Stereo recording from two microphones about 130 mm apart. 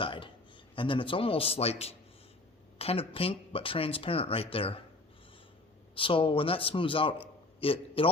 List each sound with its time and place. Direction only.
0.0 s a sound: 40° left (ahead or behind)
0.8 s speech: 40° left (ahead or behind)
5.9 s a man's voice: 40° left (ahead or behind)